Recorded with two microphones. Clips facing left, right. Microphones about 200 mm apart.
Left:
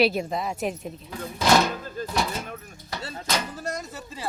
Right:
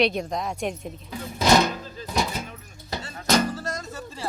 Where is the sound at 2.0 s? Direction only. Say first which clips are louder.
Left 5 dB; 50° left (ahead or behind).